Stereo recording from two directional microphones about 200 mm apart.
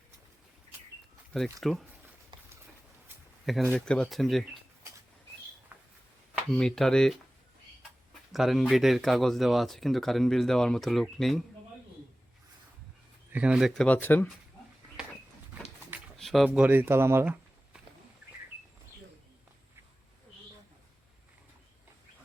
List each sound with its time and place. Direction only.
1.6 s speech: centre (ahead or behind)
2.3 s a sound: 25° right (ahead or behind)
3.7 s speech: 5° left (ahead or behind)
5.7 s a sound: 10° right (ahead or behind)
6.5 s speech: 5° left (ahead or behind)
8.3 s speech: centre (ahead or behind)
13.3 s speech: 5° right (ahead or behind)
16.1 s a sound: centre (ahead or behind)
16.5 s speech: 10° right (ahead or behind)